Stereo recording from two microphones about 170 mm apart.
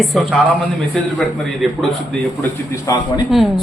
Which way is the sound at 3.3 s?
Centre (ahead or behind).